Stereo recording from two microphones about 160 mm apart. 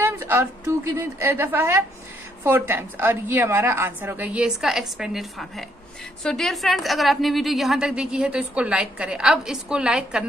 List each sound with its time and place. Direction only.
0.0 s a woman's voice: 15° right (ahead or behind)